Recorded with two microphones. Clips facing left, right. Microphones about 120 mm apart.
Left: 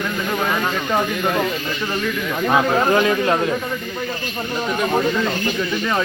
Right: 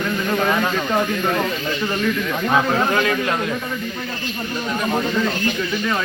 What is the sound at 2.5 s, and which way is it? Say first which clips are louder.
Speech: left 2 dB; 20° left (ahead or behind).